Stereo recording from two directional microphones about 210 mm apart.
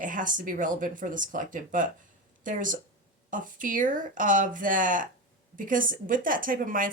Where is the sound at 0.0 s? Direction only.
40° right (ahead or behind).